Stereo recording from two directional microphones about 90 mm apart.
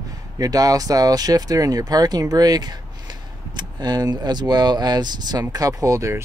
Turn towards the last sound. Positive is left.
turn(degrees=-35)  # may be behind; listen again after turning